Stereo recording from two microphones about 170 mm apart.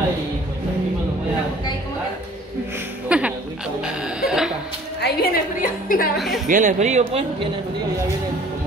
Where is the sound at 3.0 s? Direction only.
5° right (ahead or behind).